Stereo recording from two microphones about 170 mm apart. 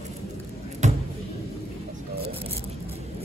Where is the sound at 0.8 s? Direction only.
45° right (ahead or behind).